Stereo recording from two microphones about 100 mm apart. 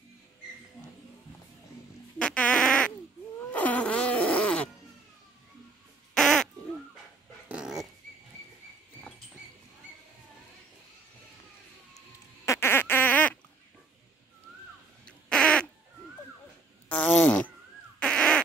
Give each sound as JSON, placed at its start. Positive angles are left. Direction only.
{"t": 2.1, "sound": "fart", "side_deg": 10}
{"t": 3.5, "sound": "music", "side_deg": 15}
{"t": 6.1, "sound": "a sound", "side_deg": 5}
{"t": 7.4, "sound": "dog", "side_deg": -10}
{"t": 12.4, "sound": "a sound", "side_deg": 25}
{"t": 15.0, "sound": "quack", "side_deg": 10}
{"t": 17.2, "sound": "insect", "side_deg": 10}
{"t": 17.9, "sound": "fart", "side_deg": 10}